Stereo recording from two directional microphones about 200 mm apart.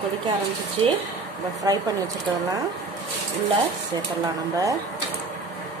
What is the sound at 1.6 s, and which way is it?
Speech, 20° right (ahead or behind).